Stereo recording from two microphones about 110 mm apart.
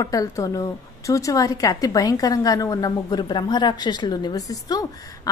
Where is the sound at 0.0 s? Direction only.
30° left (ahead or behind).